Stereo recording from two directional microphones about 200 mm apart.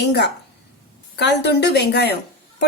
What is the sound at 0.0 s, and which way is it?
A woman's voice, 60° left (ahead or behind).